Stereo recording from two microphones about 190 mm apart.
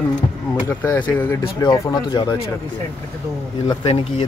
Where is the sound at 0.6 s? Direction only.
15° left (ahead or behind).